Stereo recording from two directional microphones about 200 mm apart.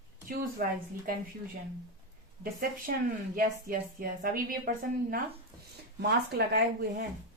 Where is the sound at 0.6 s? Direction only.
50° right (ahead or behind).